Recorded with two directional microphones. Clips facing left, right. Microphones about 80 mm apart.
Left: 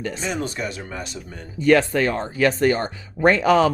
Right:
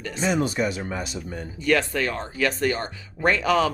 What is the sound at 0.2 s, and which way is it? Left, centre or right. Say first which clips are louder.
Speech: right 9 dB; centre.